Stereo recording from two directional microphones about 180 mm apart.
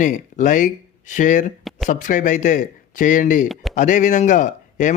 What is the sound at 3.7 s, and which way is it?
Speech, 45° left (ahead or behind).